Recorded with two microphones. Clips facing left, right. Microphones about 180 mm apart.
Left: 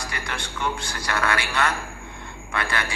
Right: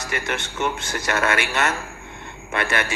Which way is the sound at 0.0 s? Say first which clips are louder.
Right 5 dB; 20° right (ahead or behind).